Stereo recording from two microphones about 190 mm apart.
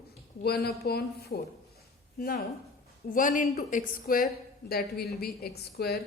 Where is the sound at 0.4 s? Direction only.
55° left (ahead or behind).